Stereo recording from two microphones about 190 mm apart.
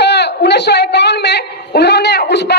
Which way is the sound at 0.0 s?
60° left (ahead or behind).